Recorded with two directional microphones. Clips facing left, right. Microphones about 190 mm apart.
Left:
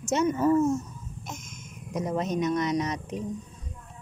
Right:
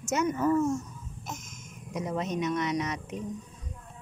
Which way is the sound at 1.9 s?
45° left (ahead or behind).